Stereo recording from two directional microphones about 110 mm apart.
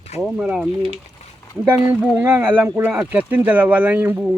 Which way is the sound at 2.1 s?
20° right (ahead or behind).